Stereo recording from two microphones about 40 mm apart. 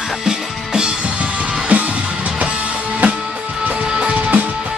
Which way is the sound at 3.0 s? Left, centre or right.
Right.